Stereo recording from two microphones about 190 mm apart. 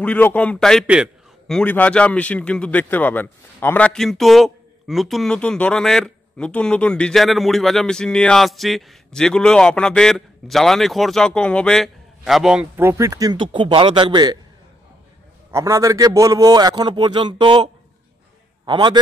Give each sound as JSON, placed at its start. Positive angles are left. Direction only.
{"t": 0.0, "sound": "a man's voice", "side_deg": 10}
{"t": 1.6, "sound": "a man's voice", "side_deg": 5}
{"t": 15.5, "sound": "a man's voice", "side_deg": -15}
{"t": 18.7, "sound": "a man's voice", "side_deg": -20}